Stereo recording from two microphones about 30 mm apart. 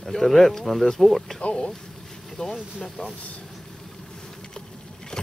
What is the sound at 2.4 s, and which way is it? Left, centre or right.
Speech, left.